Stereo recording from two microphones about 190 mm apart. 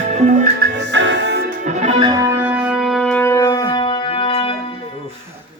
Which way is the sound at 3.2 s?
15° left (ahead or behind).